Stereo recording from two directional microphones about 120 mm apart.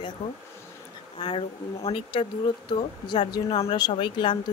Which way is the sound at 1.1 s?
45° left (ahead or behind).